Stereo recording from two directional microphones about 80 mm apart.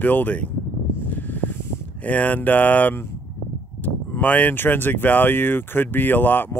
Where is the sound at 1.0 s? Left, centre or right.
Left.